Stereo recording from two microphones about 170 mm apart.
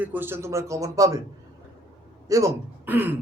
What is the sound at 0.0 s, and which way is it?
A man's voice, 10° right (ahead or behind).